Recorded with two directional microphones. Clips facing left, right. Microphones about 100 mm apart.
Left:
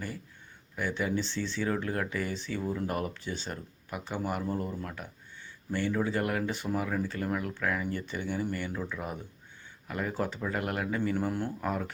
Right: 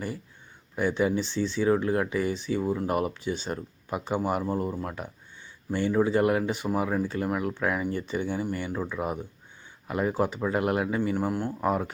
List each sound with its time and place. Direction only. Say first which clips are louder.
0.8 s speech: right 6 dB; 25° right (ahead or behind)
11.3 s speech: right 3 dB; 5° right (ahead or behind)
11.6 s speech: right 9 dB; 25° right (ahead or behind)